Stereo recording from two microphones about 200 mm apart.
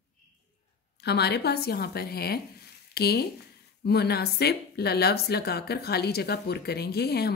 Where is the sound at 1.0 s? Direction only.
55° left (ahead or behind).